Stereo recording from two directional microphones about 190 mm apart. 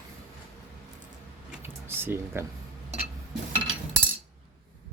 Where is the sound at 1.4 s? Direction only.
10° right (ahead or behind).